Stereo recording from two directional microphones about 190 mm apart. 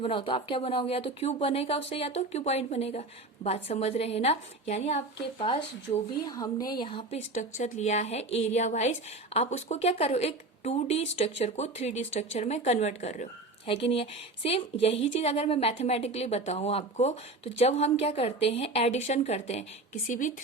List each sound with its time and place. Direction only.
0.0 s a woman's voice: 25° left (ahead or behind)